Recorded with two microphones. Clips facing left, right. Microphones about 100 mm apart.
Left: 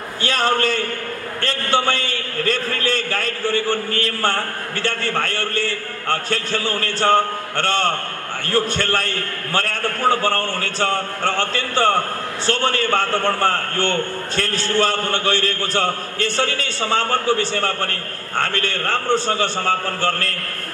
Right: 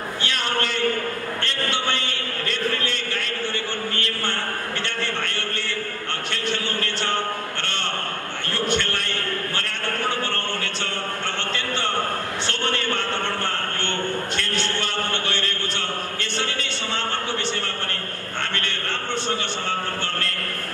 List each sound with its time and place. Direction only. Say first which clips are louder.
0.2 s a man's voice: left 8 dB; 40° left (ahead or behind)